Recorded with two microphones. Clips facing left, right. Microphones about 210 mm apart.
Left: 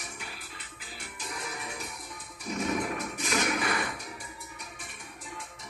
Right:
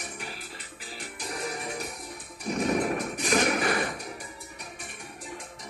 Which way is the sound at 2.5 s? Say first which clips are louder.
Right 5 dB; 45° right (ahead or behind).